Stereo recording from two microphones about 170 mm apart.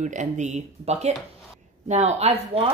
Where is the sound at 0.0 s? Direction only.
45° right (ahead or behind).